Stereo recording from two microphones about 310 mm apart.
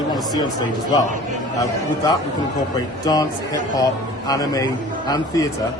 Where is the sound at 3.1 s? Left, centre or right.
Centre.